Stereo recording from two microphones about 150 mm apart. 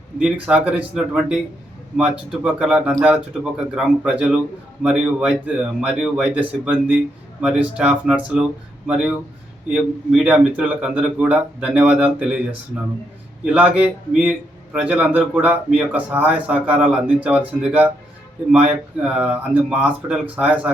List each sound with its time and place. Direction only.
0.2 s a man's voice: 5° right (ahead or behind)
13.4 s a man's voice: 10° right (ahead or behind)